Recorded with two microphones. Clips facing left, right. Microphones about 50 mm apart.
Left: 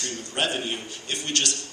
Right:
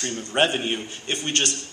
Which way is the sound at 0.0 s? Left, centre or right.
Right.